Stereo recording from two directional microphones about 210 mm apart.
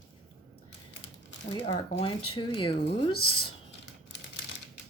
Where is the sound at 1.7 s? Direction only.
30° left (ahead or behind).